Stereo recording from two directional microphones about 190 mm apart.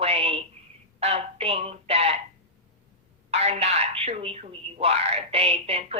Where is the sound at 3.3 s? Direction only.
35° right (ahead or behind).